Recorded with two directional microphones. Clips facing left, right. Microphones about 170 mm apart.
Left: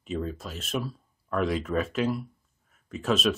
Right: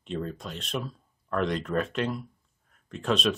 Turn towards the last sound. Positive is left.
turn(degrees=5)  # may be behind; listen again after turning